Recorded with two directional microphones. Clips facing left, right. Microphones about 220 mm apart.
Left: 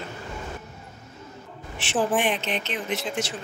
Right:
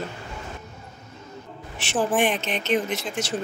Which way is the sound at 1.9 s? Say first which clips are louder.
Even; centre (ahead or behind).